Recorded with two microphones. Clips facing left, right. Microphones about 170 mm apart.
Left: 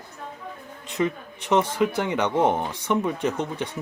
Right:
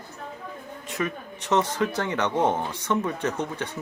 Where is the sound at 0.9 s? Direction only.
15° left (ahead or behind).